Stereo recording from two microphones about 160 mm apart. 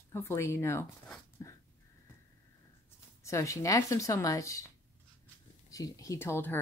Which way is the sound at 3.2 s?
20° left (ahead or behind).